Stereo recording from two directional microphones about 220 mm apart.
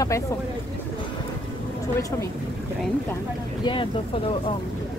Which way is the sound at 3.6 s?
20° left (ahead or behind).